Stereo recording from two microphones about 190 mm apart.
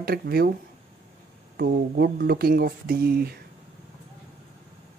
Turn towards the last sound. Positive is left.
turn(degrees=-55)  # may be behind; listen again after turning